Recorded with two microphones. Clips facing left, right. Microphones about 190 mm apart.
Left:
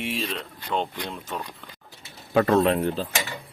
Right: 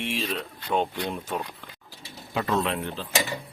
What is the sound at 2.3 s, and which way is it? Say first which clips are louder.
Speech: left 7 dB; 50° left (ahead or behind).